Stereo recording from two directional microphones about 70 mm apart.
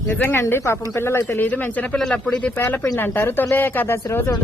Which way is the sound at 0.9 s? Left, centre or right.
Left.